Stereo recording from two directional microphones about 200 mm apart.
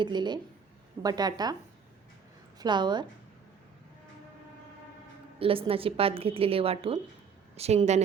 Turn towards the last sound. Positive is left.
turn(degrees=-35)  # may be behind; listen again after turning